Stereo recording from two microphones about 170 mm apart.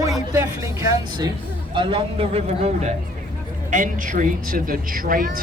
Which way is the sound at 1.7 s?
30° right (ahead or behind).